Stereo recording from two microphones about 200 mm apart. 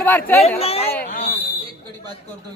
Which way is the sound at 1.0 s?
40° left (ahead or behind).